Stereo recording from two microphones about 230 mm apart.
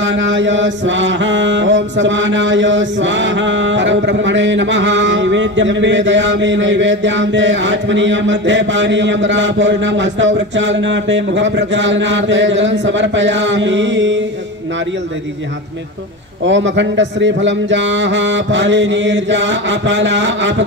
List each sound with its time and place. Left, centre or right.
0.0 s chant: right
16.4 s chant: right